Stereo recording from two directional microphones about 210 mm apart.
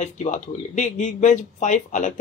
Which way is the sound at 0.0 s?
35° left (ahead or behind).